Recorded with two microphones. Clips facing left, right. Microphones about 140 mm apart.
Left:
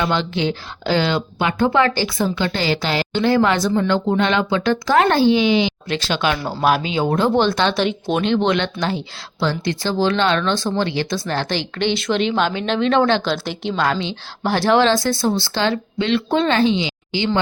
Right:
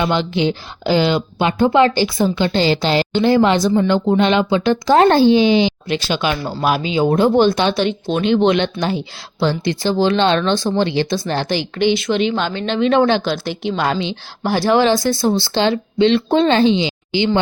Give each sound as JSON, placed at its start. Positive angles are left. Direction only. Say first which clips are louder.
{"t": 0.0, "sound": "speech", "louder": "right 3 dB", "side_deg": -15}
{"t": 4.9, "sound": "a child's voice", "louder": "right 4 dB", "side_deg": -30}
{"t": 5.9, "sound": "speech", "louder": "right 1 dB", "side_deg": -5}
{"t": 11.4, "sound": "speech", "louder": "right 4 dB", "side_deg": -10}
{"t": 12.8, "sound": "speech", "louder": "right 3 dB", "side_deg": -10}
{"t": 13.7, "sound": "speech", "louder": "even", "side_deg": -20}
{"t": 14.4, "sound": "speech", "louder": "right 1 dB", "side_deg": -5}